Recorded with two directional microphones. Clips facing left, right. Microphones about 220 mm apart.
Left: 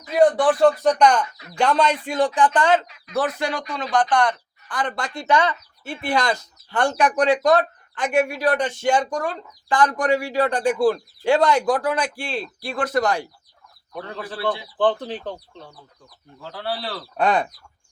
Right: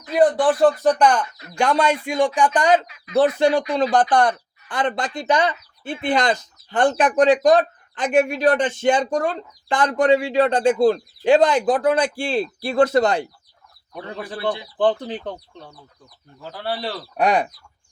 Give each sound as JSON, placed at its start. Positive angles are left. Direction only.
{"t": 0.0, "sound": "speech", "side_deg": 0}
{"t": 3.9, "sound": "speech", "side_deg": -35}
{"t": 4.7, "sound": "speech", "side_deg": -20}